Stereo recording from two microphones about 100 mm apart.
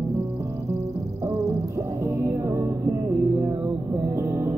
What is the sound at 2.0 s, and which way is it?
Music, 30° right (ahead or behind).